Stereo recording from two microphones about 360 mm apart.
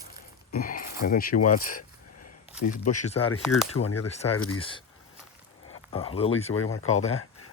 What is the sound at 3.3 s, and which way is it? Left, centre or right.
Speech, left.